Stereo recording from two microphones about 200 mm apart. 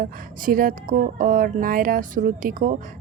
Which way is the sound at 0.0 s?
45° right (ahead or behind).